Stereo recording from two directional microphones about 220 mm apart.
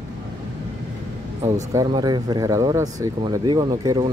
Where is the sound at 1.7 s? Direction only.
20° right (ahead or behind).